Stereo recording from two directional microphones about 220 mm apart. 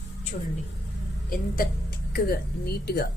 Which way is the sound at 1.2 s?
40° left (ahead or behind).